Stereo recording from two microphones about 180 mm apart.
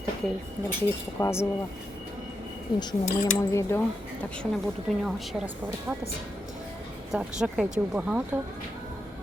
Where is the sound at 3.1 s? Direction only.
40° left (ahead or behind).